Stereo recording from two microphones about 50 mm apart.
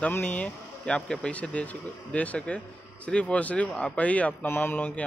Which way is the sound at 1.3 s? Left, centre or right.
Left.